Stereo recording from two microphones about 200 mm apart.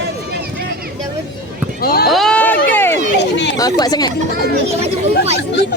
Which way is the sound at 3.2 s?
60° left (ahead or behind).